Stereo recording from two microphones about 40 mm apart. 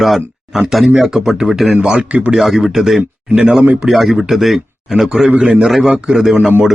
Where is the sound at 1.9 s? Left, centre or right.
Right.